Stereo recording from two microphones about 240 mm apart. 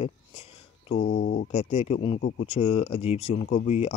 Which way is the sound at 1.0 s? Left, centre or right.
Left.